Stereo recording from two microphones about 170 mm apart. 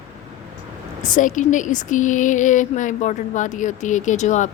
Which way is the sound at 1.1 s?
50° left (ahead or behind).